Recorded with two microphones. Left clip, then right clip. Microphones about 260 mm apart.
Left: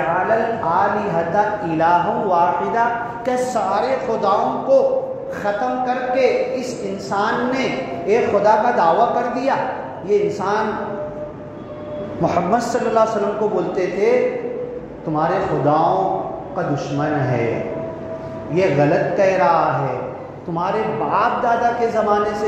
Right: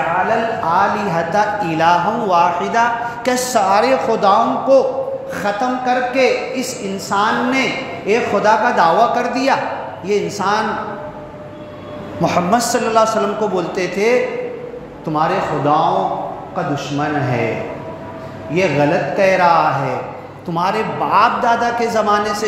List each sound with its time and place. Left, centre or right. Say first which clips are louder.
0.7 s a sound: right 3 dB; right
3.3 s a man's voice: right 5 dB; right
12.2 s a man's voice: right 3 dB; right
15.1 s a man's voice: right 2 dB; right
18.5 s a man's voice: right 1 dB; right